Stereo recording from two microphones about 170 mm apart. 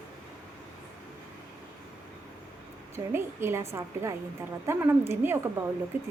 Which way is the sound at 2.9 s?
15° right (ahead or behind).